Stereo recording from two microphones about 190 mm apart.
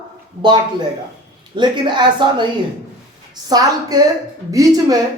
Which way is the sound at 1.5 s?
25° right (ahead or behind).